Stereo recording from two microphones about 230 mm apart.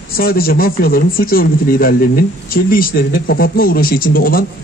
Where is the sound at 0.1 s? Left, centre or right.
Left.